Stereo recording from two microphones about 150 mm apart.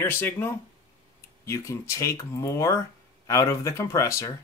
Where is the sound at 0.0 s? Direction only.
15° left (ahead or behind).